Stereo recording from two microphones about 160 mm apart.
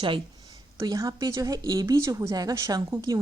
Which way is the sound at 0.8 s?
20° right (ahead or behind).